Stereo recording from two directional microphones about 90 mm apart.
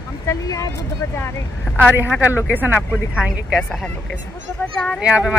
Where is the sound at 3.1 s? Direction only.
10° right (ahead or behind).